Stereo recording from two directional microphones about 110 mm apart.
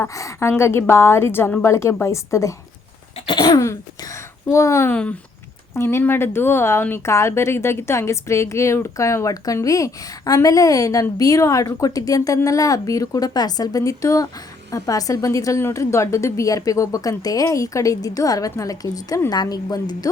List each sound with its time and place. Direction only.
0.1 s a woman's voice: 30° left (ahead or behind)
3.2 s cough: 50° left (ahead or behind)
3.5 s a sound: 30° left (ahead or behind)
4.9 s a woman's voice: 15° left (ahead or behind); by 20.1 s 35° left (ahead or behind)